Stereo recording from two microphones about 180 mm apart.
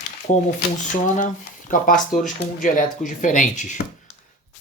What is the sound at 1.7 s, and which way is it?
Speech, 45° left (ahead or behind).